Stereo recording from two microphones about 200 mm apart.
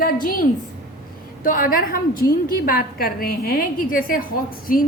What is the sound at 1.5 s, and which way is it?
A woman's voice, 45° left (ahead or behind).